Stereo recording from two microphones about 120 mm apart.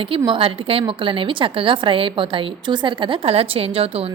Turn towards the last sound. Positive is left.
turn(degrees=-55)  # may be behind; listen again after turning